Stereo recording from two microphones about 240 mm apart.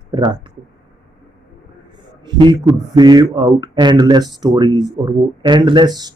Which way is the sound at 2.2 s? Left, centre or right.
Centre.